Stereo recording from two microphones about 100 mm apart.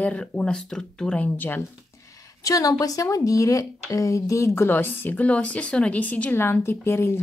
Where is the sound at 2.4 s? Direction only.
35° left (ahead or behind).